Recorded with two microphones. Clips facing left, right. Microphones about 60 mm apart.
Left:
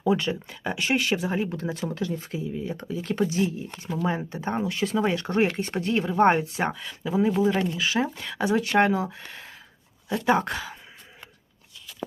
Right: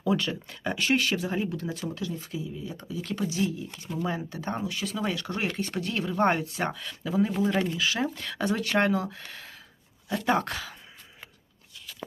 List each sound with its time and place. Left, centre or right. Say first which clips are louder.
0.0 s speech: left 3 dB; centre
1.5 s speech: left 3 dB; left